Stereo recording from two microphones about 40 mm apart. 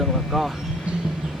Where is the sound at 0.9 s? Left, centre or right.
Right.